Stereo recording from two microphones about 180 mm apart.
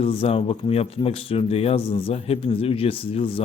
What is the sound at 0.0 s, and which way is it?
Speech, 30° left (ahead or behind).